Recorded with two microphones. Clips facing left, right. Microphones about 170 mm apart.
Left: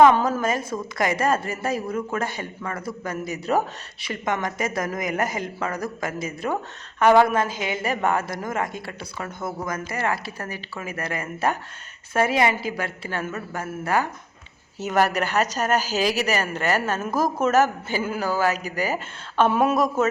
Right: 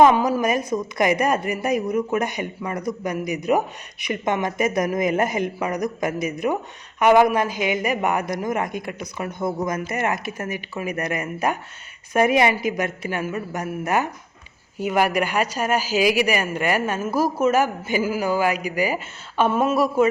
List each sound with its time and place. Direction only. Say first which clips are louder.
0.1 s speech: right 2 dB; 10° right (ahead or behind)